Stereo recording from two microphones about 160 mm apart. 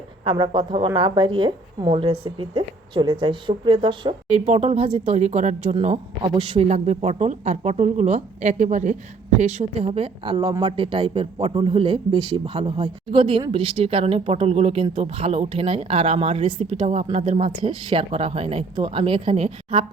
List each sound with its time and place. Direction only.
0.3 s speech: 30° right (ahead or behind)
4.4 s speech: 45° right (ahead or behind)